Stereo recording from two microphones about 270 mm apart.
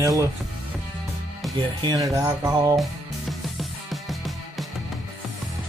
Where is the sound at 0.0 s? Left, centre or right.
Centre.